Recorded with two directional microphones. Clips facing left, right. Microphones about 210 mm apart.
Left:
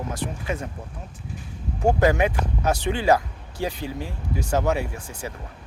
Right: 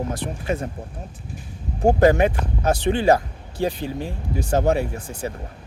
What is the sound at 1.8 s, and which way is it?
Speech, 35° right (ahead or behind).